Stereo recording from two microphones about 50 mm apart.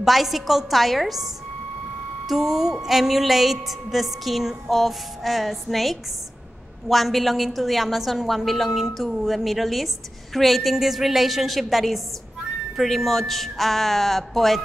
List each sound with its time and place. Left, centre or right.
0.0 s music: centre